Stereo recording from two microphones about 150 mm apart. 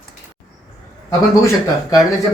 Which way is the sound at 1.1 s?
25° left (ahead or behind).